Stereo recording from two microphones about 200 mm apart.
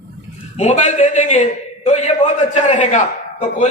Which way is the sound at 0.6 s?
35° left (ahead or behind).